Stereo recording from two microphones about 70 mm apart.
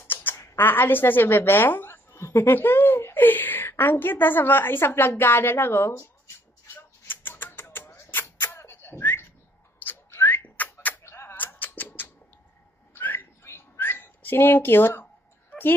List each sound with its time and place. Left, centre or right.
0.0 s a sound: left
0.6 s a woman's voice: left
7.1 s a sound: left
9.8 s whistling: left
11.1 s music: left
11.3 s music: left
12.9 s whistling: left